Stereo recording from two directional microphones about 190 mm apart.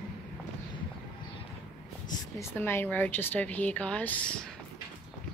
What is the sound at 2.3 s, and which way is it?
A woman's voice, 10° left (ahead or behind).